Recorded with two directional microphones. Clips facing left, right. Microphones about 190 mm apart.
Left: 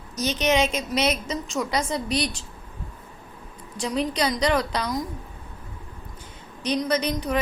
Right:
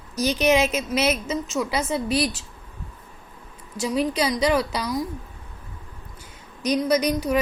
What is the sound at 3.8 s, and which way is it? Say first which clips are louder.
Speech: right 2 dB; 5° right (ahead or behind).